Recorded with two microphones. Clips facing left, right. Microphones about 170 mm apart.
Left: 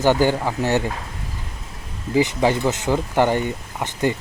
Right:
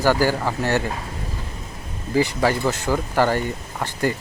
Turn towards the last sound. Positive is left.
turn(degrees=20)  # may be behind; listen again after turning